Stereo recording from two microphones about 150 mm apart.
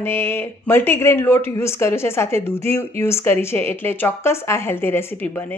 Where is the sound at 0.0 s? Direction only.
15° left (ahead or behind).